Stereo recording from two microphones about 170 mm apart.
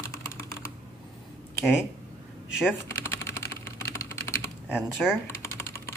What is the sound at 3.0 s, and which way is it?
Typing, 15° left (ahead or behind).